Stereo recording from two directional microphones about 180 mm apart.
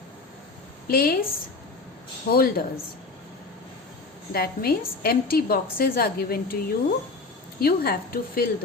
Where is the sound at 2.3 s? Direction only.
55° left (ahead or behind).